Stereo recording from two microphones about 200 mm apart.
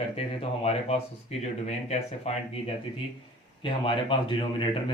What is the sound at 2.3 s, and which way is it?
Speech, 35° left (ahead or behind).